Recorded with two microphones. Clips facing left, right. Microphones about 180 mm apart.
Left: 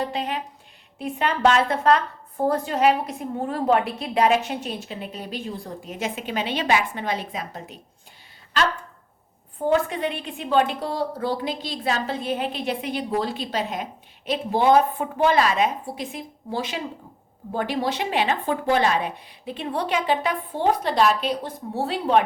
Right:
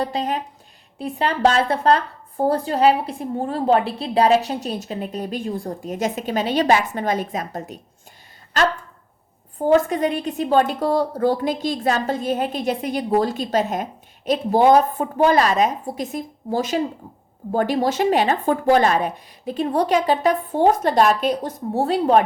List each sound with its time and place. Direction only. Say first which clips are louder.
0.0 s a woman's voice: right 4 dB; 40° right (ahead or behind)